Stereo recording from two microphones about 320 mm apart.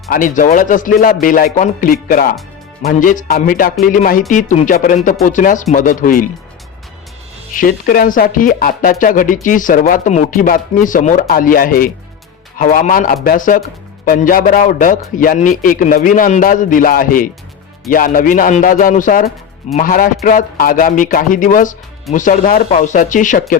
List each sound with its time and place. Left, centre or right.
0.1 s speech: left
7.5 s speech: left